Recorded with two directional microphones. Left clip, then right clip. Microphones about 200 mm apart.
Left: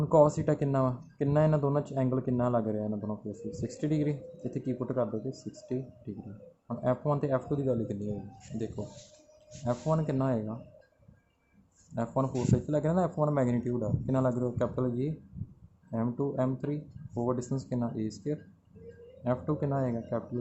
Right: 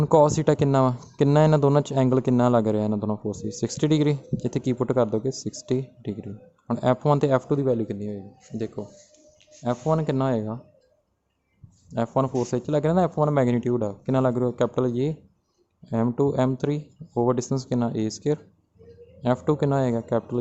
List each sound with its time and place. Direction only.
0.0 s speech: 45° right (ahead or behind)
11.9 s speech: 40° right (ahead or behind)